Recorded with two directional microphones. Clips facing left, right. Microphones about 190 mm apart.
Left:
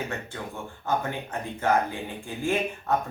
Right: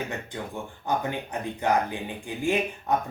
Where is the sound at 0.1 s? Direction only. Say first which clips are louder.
Right 1 dB; 15° right (ahead or behind).